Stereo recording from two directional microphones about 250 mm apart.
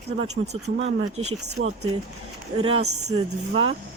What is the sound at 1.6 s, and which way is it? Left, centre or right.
Speech, right.